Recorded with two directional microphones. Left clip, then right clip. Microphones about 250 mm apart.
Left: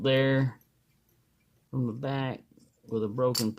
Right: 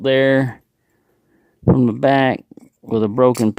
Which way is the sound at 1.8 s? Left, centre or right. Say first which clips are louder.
Right 17 dB; right.